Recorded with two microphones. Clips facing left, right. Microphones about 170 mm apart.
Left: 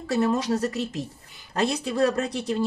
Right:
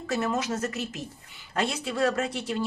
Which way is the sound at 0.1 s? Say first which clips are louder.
Left 5 dB; 35° left (ahead or behind).